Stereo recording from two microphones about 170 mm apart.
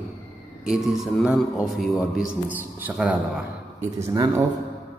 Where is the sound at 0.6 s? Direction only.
5° right (ahead or behind).